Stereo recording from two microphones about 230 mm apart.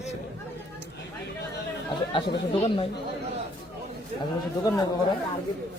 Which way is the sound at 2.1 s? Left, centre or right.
Left.